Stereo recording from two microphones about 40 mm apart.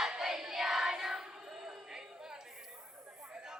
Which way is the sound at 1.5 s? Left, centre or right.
Centre.